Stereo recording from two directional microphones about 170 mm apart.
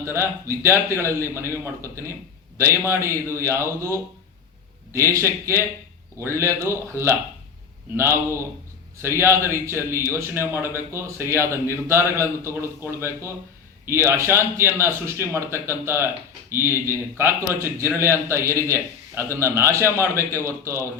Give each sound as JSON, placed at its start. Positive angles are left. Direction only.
{"t": 0.1, "sound": "a man's voice", "side_deg": -15}